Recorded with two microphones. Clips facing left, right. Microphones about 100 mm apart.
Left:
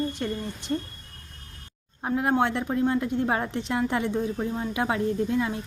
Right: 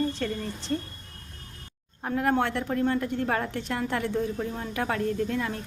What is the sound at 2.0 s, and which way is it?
A woman's voice, 20° left (ahead or behind).